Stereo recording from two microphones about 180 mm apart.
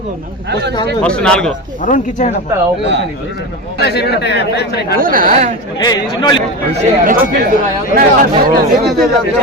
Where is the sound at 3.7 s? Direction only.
65° left (ahead or behind).